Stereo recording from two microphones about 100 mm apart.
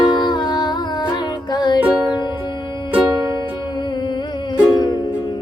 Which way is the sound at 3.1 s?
35° right (ahead or behind).